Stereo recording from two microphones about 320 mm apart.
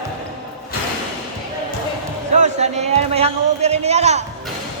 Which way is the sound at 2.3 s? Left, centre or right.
Right.